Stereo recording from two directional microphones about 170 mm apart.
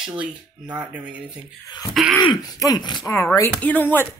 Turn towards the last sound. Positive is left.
turn(degrees=10)  # may be behind; listen again after turning